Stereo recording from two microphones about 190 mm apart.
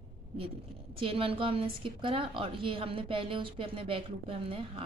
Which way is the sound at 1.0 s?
30° right (ahead or behind).